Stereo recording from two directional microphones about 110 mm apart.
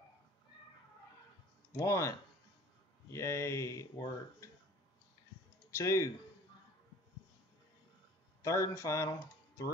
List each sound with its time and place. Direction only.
1.7 s speech: 25° left (ahead or behind)
5.7 s speech: 30° left (ahead or behind)
8.4 s speech: 30° left (ahead or behind)